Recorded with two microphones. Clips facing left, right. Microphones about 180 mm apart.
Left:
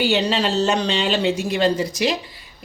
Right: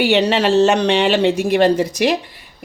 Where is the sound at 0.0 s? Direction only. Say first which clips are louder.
Right 5 dB; 65° right (ahead or behind).